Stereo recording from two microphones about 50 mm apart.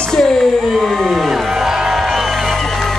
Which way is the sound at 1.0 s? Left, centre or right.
Centre.